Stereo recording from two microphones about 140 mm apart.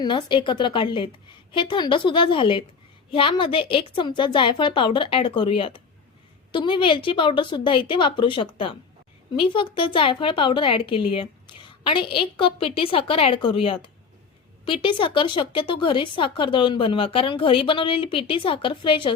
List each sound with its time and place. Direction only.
0.0 s speech: 35° left (ahead or behind)